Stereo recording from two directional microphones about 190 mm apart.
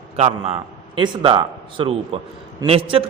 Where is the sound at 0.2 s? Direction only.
35° right (ahead or behind).